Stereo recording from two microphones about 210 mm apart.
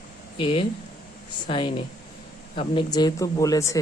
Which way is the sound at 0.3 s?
25° left (ahead or behind).